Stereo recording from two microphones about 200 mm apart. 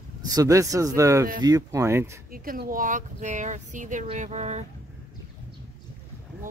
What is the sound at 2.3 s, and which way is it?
Speech, 45° right (ahead or behind).